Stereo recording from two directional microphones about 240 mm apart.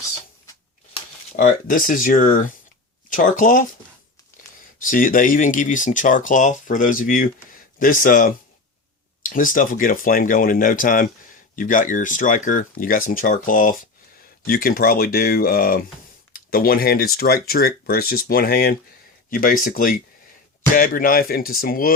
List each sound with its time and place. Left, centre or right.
1.4 s speech: left
4.8 s speech: left